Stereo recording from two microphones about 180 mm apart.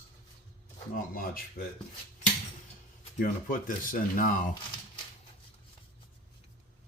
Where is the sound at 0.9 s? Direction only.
50° left (ahead or behind).